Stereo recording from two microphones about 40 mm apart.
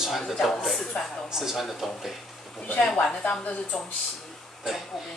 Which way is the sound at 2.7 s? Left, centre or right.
Left.